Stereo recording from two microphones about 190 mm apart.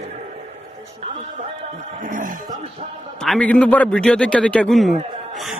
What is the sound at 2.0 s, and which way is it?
Speech, 45° right (ahead or behind).